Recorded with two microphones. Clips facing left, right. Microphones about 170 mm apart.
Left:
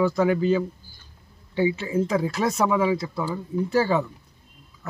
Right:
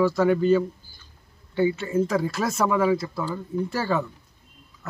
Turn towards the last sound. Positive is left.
turn(degrees=0)  # may be behind; listen again after turning